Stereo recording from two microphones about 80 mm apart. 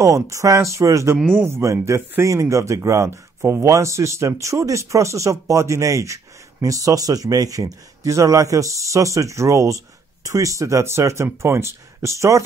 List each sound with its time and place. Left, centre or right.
0.0 s speech: right